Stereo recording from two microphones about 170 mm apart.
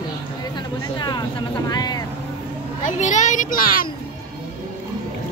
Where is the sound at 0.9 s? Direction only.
25° left (ahead or behind).